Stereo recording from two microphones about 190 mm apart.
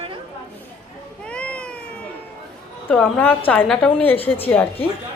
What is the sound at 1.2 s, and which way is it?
Cat, 5° left (ahead or behind).